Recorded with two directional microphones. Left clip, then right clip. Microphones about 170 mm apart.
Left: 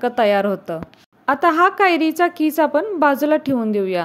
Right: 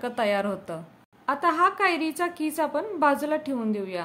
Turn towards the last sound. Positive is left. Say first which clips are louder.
# left 10 dB
turn(degrees=40)  # may be behind; listen again after turning